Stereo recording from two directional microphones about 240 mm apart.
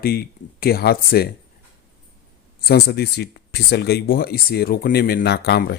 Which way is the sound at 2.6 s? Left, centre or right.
Left.